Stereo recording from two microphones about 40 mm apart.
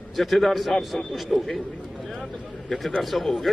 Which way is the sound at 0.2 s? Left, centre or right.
Centre.